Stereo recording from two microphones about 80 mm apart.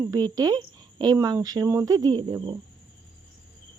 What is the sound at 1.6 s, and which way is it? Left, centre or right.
Speech, right.